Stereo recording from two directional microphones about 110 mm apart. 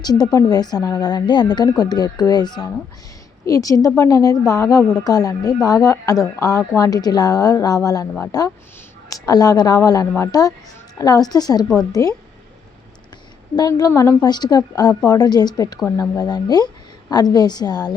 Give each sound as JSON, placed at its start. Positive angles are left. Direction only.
{"t": 0.0, "sound": "a woman's voice", "side_deg": 35}
{"t": 13.6, "sound": "a woman's voice", "side_deg": 35}